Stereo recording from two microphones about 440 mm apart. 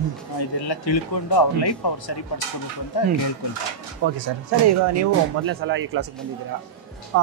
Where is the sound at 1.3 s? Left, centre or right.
Left.